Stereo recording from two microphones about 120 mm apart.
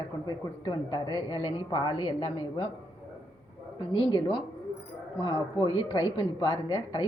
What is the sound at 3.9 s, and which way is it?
Speech, 40° left (ahead or behind).